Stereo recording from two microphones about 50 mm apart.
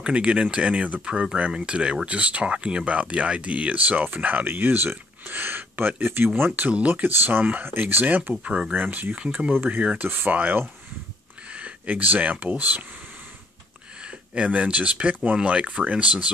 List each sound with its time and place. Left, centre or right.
0.0 s speech: right
8.5 s speech: centre
8.7 s speech: right
9.8 s speech: right
11.5 s speech: right
14.0 s speech: right